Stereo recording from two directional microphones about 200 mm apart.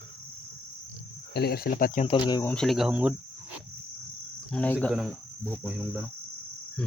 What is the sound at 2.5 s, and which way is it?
Cricket, centre (ahead or behind).